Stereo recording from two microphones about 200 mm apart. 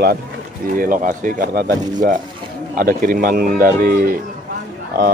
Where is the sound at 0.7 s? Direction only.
40° right (ahead or behind).